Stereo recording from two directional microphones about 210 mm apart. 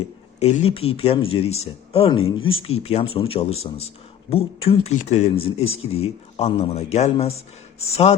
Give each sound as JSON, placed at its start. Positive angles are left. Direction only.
{"t": 0.0, "sound": "speech", "side_deg": 30}